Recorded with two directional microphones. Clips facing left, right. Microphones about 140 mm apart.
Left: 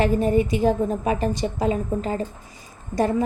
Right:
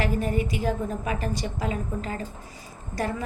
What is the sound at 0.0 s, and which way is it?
A woman's voice, 25° left (ahead or behind).